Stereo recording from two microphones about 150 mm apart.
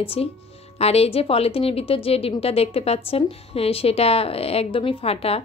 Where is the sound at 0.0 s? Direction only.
40° left (ahead or behind).